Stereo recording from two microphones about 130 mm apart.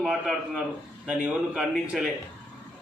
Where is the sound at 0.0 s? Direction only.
5° right (ahead or behind).